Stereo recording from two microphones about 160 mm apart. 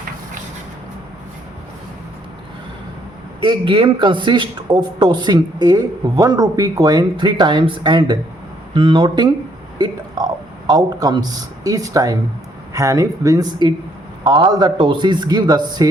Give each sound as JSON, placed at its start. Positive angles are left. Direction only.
{"t": 3.4, "sound": "a man's voice", "side_deg": -30}